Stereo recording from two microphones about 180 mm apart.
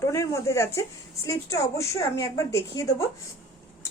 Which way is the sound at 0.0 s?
15° left (ahead or behind).